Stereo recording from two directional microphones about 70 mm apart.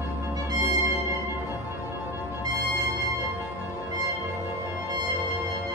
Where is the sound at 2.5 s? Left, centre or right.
Right.